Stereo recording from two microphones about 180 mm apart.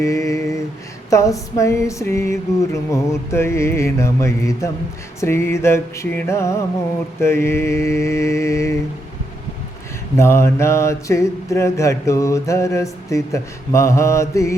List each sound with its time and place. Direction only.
0.0 s a sound: 15° left (ahead or behind)
1.1 s mantra: 15° left (ahead or behind)
10.2 s mantra: 15° left (ahead or behind)